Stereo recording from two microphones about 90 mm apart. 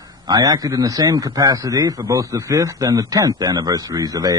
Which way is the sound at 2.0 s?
40° right (ahead or behind).